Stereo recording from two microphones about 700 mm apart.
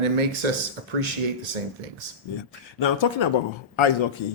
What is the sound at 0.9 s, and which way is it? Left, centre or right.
Speech, right.